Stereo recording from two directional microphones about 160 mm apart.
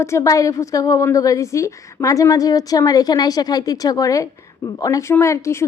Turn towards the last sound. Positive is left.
turn(degrees=15)  # may be behind; listen again after turning